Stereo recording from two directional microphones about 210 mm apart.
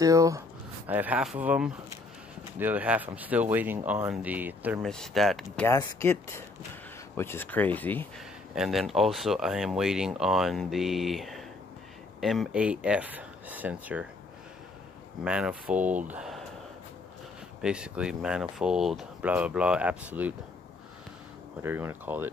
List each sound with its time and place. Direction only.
0.0 s speech: 15° right (ahead or behind)
4.8 s speech: centre (ahead or behind)
5.7 s speech: 15° left (ahead or behind); by 14.0 s 5° right (ahead or behind)
15.2 s speech: 5° right (ahead or behind)
17.6 s speech: 5° right (ahead or behind)
21.5 s speech: 10° right (ahead or behind)